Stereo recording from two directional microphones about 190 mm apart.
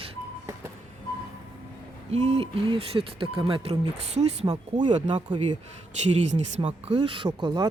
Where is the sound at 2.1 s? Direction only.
35° right (ahead or behind).